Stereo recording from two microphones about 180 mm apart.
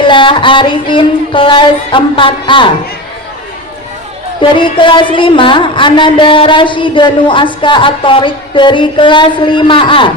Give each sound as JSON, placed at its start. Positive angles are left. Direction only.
{"t": 0.0, "sound": "speech", "side_deg": 25}
{"t": 4.4, "sound": "speech", "side_deg": 30}